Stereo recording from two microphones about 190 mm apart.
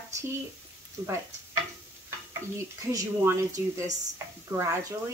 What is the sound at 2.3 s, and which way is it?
A woman's voice, 20° right (ahead or behind).